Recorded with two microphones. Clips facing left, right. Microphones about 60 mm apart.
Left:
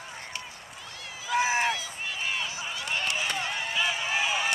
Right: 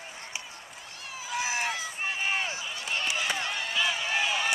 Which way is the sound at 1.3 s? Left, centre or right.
Left.